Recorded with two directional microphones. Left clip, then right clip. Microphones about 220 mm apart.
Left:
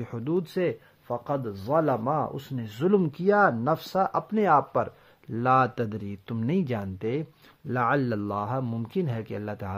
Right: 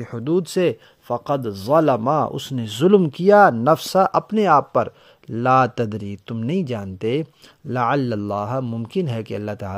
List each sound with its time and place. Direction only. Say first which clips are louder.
0.2 s a man's voice: right 8 dB; 30° right (ahead or behind)
7.0 s a man's voice: right 8 dB; 35° right (ahead or behind)